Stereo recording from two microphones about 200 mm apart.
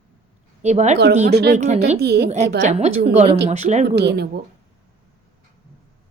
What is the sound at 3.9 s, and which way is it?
Speech, 55° right (ahead or behind).